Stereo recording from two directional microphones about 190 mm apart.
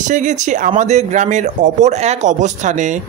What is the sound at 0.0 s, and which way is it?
Speech, 40° right (ahead or behind).